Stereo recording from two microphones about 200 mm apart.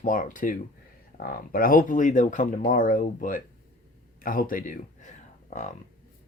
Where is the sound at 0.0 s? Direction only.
40° left (ahead or behind).